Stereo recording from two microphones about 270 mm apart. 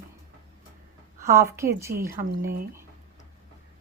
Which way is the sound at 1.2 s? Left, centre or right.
Centre.